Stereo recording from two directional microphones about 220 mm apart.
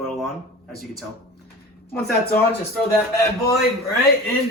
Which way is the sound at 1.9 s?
10° left (ahead or behind).